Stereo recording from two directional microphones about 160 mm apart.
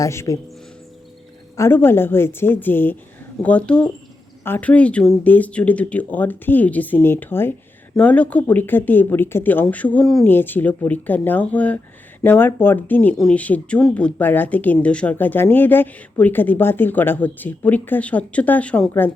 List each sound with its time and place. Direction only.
0.0 s a man's voice: 20° left (ahead or behind)
1.5 s speech: 15° left (ahead or behind)